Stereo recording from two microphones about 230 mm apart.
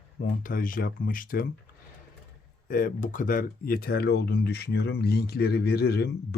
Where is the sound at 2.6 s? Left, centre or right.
Left.